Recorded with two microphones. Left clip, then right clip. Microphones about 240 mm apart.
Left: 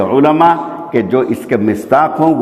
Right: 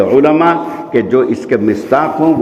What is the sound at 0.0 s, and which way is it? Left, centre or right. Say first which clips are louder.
A man's voice: even; left.